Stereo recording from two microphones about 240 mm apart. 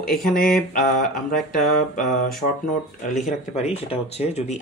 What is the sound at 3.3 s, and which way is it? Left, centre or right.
Speech, left.